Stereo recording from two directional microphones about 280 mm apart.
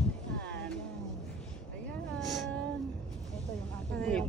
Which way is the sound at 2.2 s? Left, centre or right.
Centre.